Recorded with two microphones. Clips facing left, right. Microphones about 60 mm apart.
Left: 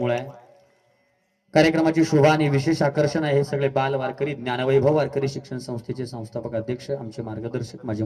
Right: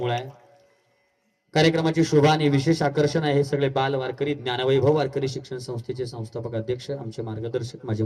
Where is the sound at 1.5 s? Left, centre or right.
Left.